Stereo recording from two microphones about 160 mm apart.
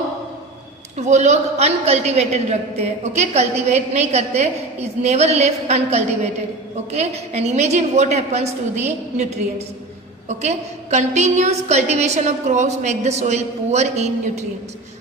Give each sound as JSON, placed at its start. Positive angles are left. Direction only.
{"t": 0.9, "sound": "a woman's voice", "side_deg": -45}